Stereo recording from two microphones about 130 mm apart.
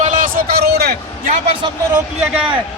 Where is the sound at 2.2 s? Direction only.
5° right (ahead or behind).